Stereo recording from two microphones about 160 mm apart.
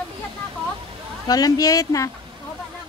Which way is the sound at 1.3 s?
25° left (ahead or behind).